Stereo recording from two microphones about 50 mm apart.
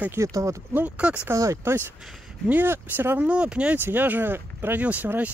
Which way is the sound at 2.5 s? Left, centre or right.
Right.